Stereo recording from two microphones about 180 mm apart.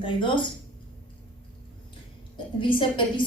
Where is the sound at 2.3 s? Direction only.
25° left (ahead or behind).